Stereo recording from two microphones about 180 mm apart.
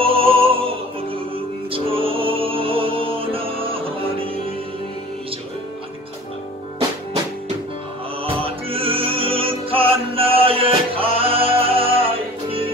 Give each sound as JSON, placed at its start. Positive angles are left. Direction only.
{"t": 0.0, "sound": "music", "side_deg": -30}
{"t": 8.2, "sound": "music", "side_deg": -30}